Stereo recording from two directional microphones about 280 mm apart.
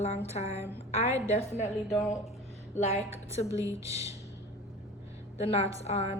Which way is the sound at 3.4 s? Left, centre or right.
Centre.